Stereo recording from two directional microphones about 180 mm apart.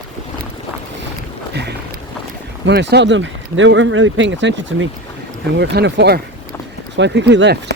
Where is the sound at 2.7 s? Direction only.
70° right (ahead or behind); by 4.9 s 90° right.